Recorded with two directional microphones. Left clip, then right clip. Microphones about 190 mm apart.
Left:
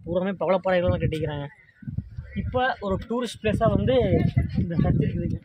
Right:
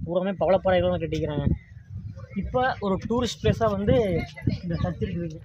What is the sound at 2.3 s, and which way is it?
Speech, 5° right (ahead or behind).